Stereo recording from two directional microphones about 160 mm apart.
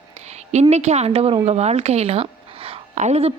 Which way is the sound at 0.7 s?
45° right (ahead or behind).